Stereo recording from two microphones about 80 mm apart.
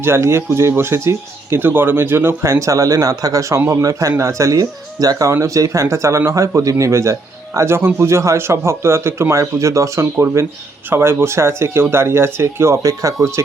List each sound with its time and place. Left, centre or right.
0.0 s speech: right
4.6 s speech: right
5.3 s speech: right